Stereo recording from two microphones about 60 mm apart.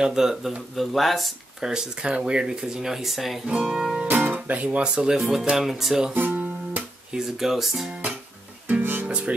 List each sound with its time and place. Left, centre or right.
0.0 s speech: centre
1.7 s speech: centre
4.1 s speech: right; by 6.1 s centre
6.1 s music: right
7.1 s speech: centre
8.8 s music: right